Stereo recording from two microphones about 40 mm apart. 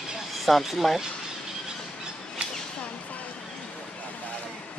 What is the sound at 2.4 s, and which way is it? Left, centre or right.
Whip, right.